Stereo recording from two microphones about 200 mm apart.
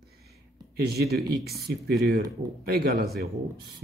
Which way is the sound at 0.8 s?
50° right (ahead or behind).